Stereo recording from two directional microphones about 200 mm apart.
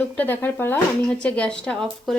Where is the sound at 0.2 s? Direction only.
10° left (ahead or behind).